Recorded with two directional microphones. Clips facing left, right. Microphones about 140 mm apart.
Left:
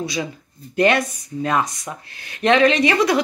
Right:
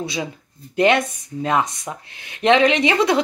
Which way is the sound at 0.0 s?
25° right (ahead or behind).